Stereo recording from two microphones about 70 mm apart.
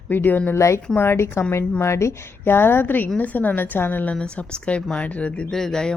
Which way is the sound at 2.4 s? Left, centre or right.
Left.